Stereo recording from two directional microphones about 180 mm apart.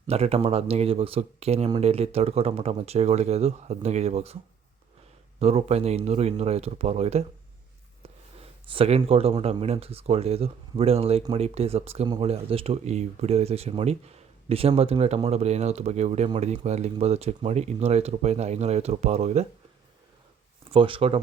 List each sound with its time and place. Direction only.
0.1 s speech: 35° right (ahead or behind)
5.4 s speech: 35° right (ahead or behind)
20.7 s speech: 30° right (ahead or behind)